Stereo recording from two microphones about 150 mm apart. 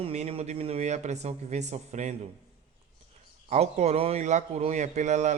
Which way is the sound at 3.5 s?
45° right (ahead or behind).